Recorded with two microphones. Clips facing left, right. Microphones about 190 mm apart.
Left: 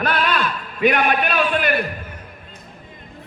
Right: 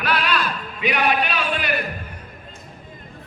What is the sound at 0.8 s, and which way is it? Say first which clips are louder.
Speech: left 4 dB; 50° left (ahead or behind).